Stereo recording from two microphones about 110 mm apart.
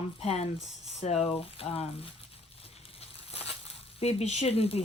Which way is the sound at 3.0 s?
65° left (ahead or behind).